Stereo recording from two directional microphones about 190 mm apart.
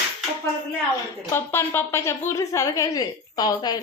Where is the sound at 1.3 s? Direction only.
10° left (ahead or behind).